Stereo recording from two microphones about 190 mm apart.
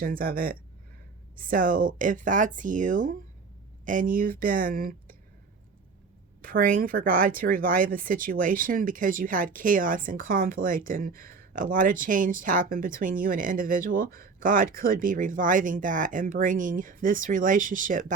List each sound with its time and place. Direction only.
0.0 s speech: 50° right (ahead or behind)
6.4 s speech: 50° right (ahead or behind)